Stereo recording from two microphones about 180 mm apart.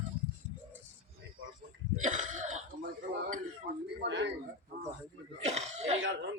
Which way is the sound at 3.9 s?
80° right.